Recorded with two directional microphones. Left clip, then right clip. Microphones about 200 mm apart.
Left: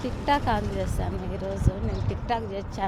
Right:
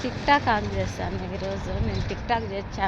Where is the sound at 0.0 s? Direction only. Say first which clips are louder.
Right 2 dB; 50° left (ahead or behind).